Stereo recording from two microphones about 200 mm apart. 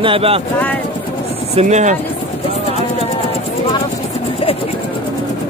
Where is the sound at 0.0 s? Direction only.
25° right (ahead or behind).